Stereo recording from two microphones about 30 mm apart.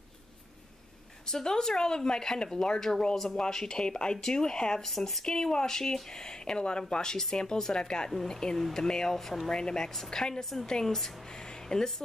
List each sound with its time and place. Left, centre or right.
1.2 s speech: left
4.8 s speech: centre
5.2 s speech: left
9.1 s speech: centre
9.5 s speech: left
11.7 s speech: left